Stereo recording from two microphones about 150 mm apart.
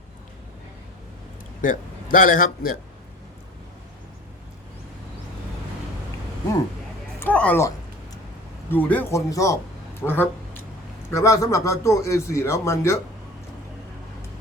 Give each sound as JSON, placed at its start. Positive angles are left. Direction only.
{"t": 1.6, "sound": "a man's voice", "side_deg": 60}
{"t": 7.2, "sound": "a sound", "side_deg": 10}
{"t": 8.7, "sound": "a man's voice", "side_deg": 10}